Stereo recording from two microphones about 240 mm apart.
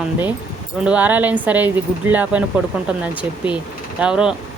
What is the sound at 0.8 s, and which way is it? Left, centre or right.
Speech, centre.